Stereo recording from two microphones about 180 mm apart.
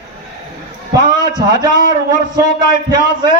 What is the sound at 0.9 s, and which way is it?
Speech, 25° right (ahead or behind).